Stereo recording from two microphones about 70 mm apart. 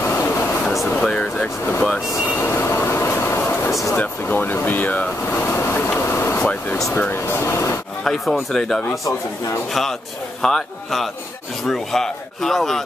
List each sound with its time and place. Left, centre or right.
0.0 s a sound: left
1.0 s speech: centre
2.4 s train: left
3.9 s speech: left
5.9 s vehicle: left
6.9 s speech: left
7.2 s speech: left
8.0 s speech: centre
10.4 s speech: centre